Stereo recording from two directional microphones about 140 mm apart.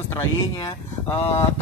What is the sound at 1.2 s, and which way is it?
Speech, 45° left (ahead or behind).